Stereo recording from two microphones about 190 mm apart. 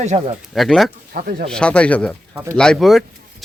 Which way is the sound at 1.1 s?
50° right (ahead or behind).